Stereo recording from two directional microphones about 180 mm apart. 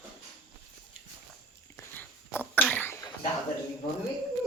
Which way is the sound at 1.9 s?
10° left (ahead or behind).